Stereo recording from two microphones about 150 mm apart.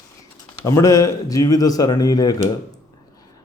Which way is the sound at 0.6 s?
20° left (ahead or behind).